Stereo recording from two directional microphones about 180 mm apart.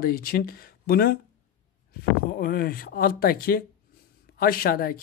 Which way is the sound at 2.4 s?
55° left (ahead or behind).